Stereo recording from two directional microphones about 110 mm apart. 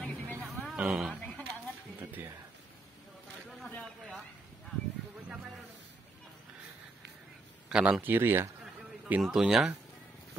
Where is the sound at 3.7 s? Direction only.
5° left (ahead or behind).